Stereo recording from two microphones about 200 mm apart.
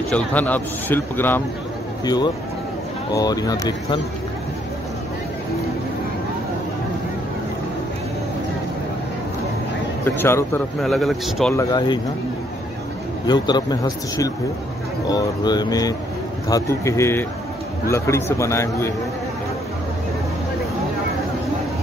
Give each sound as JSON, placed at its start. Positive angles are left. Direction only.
{"t": 0.1, "sound": "speech", "side_deg": 10}
{"t": 2.0, "sound": "speech", "side_deg": 20}
{"t": 10.0, "sound": "speech", "side_deg": 10}
{"t": 10.8, "sound": "a man's voice", "side_deg": 0}
{"t": 11.5, "sound": "speech", "side_deg": 20}
{"t": 13.3, "sound": "speech", "side_deg": 20}